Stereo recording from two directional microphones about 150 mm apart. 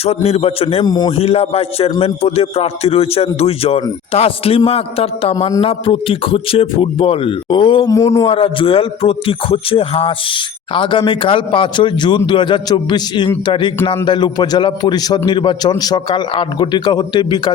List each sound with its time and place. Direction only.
0.0 s a man's voice: 45° left (ahead or behind)
0.9 s a man's voice: 30° left (ahead or behind)
1.1 s a man's voice: 45° left (ahead or behind)
7.9 s a man's voice: 20° left (ahead or behind)
8.3 s a man's voice: 35° left (ahead or behind)